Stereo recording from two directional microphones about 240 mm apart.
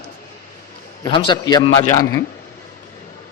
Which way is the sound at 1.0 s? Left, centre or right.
Centre.